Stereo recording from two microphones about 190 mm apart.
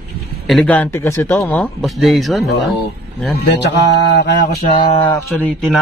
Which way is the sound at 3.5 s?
65° left (ahead or behind).